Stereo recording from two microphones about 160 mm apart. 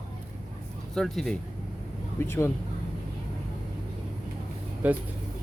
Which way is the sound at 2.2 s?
15° left (ahead or behind).